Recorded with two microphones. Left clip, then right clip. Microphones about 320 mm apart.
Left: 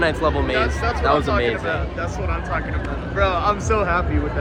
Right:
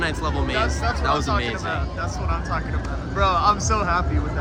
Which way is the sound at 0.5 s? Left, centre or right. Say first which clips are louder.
Left 2 dB; centre.